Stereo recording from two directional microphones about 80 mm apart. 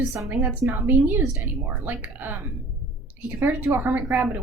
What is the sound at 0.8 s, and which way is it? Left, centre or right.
Speech, right.